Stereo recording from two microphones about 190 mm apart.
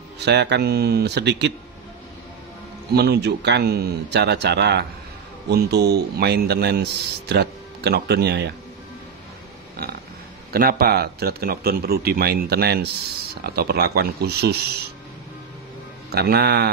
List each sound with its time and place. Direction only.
0.2 s a man's voice: 60° right (ahead or behind)
2.9 s a man's voice: 60° right (ahead or behind)
10.5 s a man's voice: 50° right (ahead or behind)
16.1 s a man's voice: 55° right (ahead or behind)